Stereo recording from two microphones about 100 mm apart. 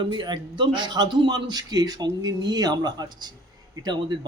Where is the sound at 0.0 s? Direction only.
50° right (ahead or behind).